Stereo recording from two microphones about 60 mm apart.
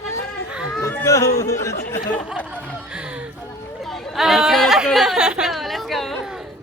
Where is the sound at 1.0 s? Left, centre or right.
Left.